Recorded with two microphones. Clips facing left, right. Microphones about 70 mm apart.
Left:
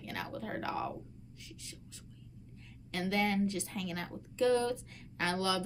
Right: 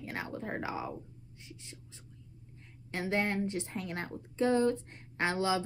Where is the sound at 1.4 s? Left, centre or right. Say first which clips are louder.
Right 2 dB; right.